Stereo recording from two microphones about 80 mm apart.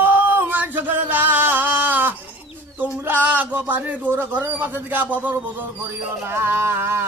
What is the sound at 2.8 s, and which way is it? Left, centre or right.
Speech, right.